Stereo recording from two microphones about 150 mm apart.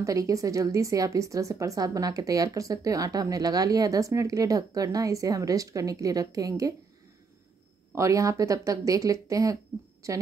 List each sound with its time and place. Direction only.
0.0 s speech: 20° right (ahead or behind)
7.9 s speech: 20° right (ahead or behind)